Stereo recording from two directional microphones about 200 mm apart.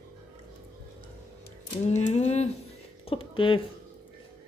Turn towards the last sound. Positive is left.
turn(degrees=25)  # may be behind; listen again after turning